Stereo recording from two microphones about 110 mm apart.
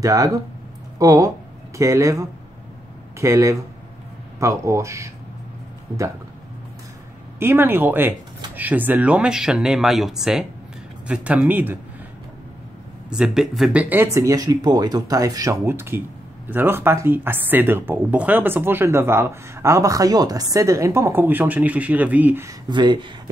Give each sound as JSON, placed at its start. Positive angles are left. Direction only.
{"t": 0.0, "sound": "speech", "side_deg": -30}
{"t": 7.3, "sound": "speech", "side_deg": -20}
{"t": 13.1, "sound": "speech", "side_deg": -5}
{"t": 14.1, "sound": "speech", "side_deg": -30}
{"t": 22.7, "sound": "speech", "side_deg": -45}